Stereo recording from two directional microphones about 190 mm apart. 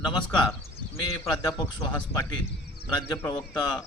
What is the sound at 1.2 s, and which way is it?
A man's voice, 15° left (ahead or behind).